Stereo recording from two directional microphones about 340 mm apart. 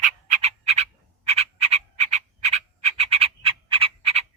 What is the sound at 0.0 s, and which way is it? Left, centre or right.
Frog, centre.